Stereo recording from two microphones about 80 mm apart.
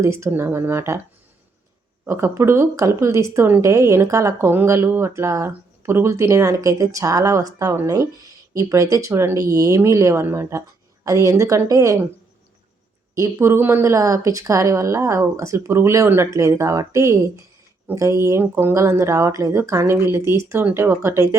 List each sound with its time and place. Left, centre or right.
0.0 s speech: right
2.0 s speech: right
4.4 s speech: right
11.0 s speech: right
13.1 s speech: right
13.8 s speech: right